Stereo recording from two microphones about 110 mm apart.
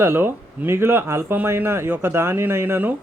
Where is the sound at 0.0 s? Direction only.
20° right (ahead or behind).